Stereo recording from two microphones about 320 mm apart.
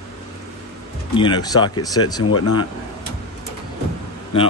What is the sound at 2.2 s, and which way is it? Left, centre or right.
Speech, left.